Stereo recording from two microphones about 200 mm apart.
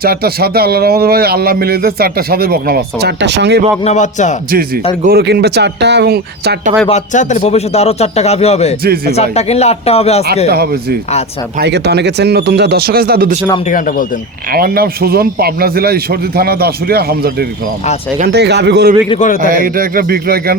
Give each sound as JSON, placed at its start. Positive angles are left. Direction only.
{"t": 0.0, "sound": "a man's voice", "side_deg": -50}
{"t": 3.8, "sound": "a man's voice", "side_deg": 35}
{"t": 5.0, "sound": "speech", "side_deg": -55}
{"t": 6.8, "sound": "a man's voice", "side_deg": 35}
{"t": 10.5, "sound": "a man's voice", "side_deg": -50}
{"t": 13.7, "sound": "a man's voice", "side_deg": 40}
{"t": 14.5, "sound": "a man's voice", "side_deg": -50}
{"t": 19.0, "sound": "a man's voice", "side_deg": 30}
{"t": 19.4, "sound": "a man's voice", "side_deg": -45}